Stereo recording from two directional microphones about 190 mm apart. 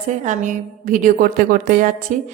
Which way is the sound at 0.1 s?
40° right (ahead or behind).